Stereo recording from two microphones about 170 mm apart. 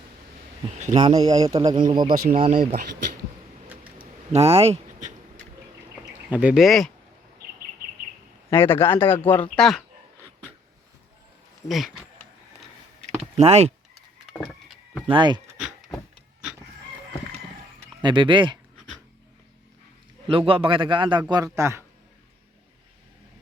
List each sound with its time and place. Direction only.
0.9 s a man's voice: 25° right (ahead or behind)
2.5 s speech: 55° right (ahead or behind)
4.3 s speech: 35° right (ahead or behind)
6.3 s speech: 5° right (ahead or behind)
8.4 s speech: 15° left (ahead or behind)
11.7 s speech: centre (ahead or behind)
13.3 s speech: 40° right (ahead or behind)
14.3 s a sound: 5° left (ahead or behind)
15.0 s a man's voice: 30° right (ahead or behind)
15.5 s a sound: 5° right (ahead or behind)
18.0 s a man's voice: 30° right (ahead or behind)
20.2 s a man's voice: 30° right (ahead or behind); by 21.8 s 15° right (ahead or behind)